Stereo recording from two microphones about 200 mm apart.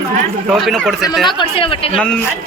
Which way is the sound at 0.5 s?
Centre (ahead or behind).